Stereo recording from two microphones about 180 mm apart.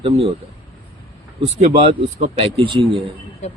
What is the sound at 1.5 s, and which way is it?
Speech, 35° right (ahead or behind).